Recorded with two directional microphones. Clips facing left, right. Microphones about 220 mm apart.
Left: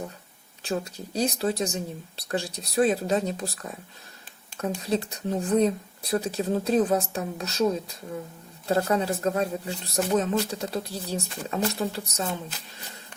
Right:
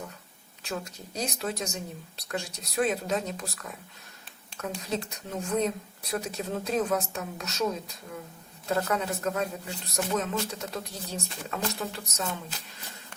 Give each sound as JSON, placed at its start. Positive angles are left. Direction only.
{"t": 0.6, "sound": "speech", "side_deg": 30}
{"t": 4.8, "sound": "speech", "side_deg": 35}